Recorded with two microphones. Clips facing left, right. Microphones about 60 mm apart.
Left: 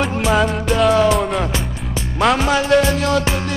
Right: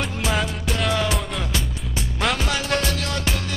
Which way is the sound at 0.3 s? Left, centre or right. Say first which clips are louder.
Left 9 dB; centre.